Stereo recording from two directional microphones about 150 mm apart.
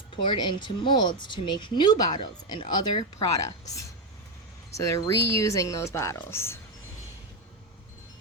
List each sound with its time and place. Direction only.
0.3 s speech: 30° left (ahead or behind)
4.8 s speech: 20° left (ahead or behind)